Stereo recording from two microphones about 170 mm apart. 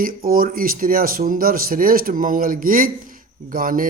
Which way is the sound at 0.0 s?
60° right (ahead or behind).